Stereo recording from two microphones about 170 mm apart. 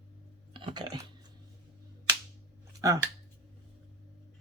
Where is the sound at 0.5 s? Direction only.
25° right (ahead or behind).